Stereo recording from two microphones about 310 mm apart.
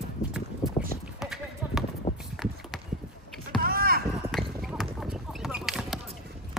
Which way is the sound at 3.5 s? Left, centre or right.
Right.